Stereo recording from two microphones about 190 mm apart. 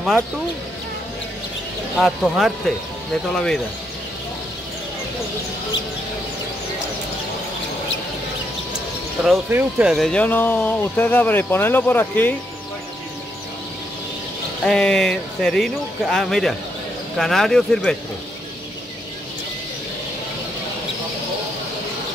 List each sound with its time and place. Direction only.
2.0 s speech: centre (ahead or behind)
9.5 s speech: 10° right (ahead or behind); by 12.4 s 10° left (ahead or behind)
14.6 s speech: 5° left (ahead or behind)